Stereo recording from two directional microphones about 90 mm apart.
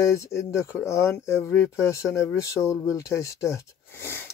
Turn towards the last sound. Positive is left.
turn(degrees=30)  # may be behind; listen again after turning